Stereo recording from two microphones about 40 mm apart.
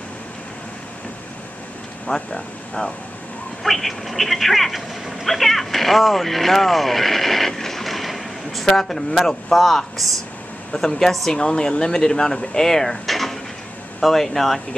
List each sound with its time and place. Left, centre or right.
2.0 s speech: centre
3.6 s speech: centre
13.0 s drawer open or close: centre
14.0 s speech: centre